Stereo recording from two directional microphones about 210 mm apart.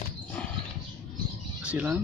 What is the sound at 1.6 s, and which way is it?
Speech, 10° right (ahead or behind).